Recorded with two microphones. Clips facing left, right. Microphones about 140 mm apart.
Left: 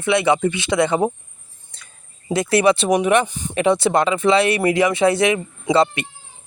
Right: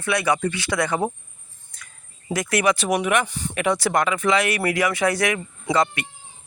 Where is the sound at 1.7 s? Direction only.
25° left (ahead or behind).